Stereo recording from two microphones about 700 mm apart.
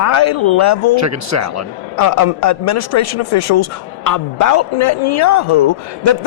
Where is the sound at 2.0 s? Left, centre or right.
Left.